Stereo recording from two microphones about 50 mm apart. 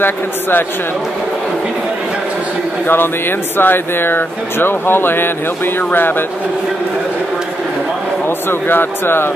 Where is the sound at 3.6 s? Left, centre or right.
Left.